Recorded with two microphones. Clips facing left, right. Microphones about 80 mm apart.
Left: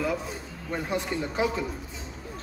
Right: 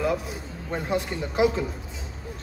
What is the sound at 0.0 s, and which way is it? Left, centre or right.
Speech, centre.